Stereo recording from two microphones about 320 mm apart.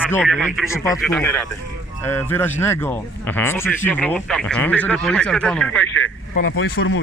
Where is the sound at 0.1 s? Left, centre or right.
Centre.